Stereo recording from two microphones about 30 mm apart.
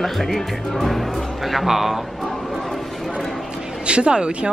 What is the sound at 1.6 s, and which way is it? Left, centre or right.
Speech, centre.